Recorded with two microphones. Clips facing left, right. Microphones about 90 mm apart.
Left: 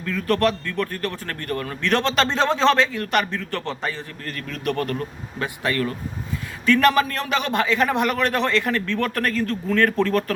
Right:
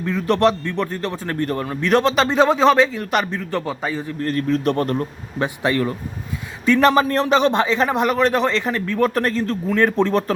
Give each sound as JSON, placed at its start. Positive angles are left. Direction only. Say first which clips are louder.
{"t": 0.0, "sound": "speech", "louder": "right 4 dB", "side_deg": -20}
{"t": 4.2, "sound": "a man's voice", "louder": "right 11 dB", "side_deg": -30}